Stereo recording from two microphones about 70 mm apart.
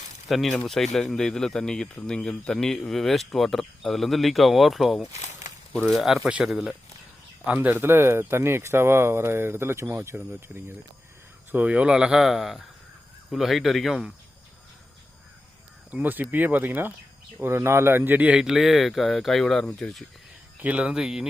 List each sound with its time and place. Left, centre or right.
0.3 s speech: centre
7.4 s speech: right
10.1 s speech: right
11.5 s speech: centre
15.9 s speech: right; by 20.1 s centre
20.6 s speech: centre